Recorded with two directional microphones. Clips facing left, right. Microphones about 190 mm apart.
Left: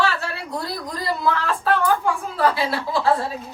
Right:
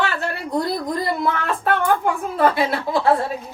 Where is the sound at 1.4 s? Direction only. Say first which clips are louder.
Even; 55° right (ahead or behind).